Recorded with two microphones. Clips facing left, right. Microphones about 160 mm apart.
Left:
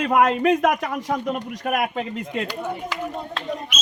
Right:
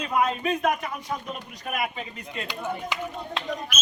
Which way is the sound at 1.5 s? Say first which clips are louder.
Left 4 dB; 75° left (ahead or behind).